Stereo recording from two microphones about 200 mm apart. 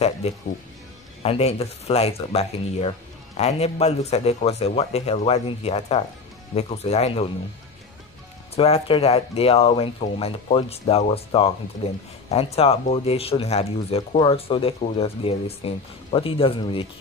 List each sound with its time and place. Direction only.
0.2 s speech: 30° left (ahead or behind)
8.5 s speech: 30° left (ahead or behind)